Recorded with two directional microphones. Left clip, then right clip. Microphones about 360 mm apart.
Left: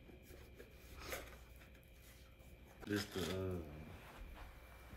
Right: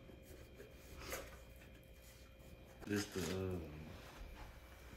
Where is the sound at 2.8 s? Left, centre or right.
Centre.